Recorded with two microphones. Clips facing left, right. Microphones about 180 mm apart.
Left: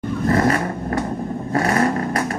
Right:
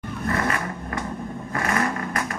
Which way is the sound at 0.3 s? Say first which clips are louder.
Left 7 dB; 35° left (ahead or behind).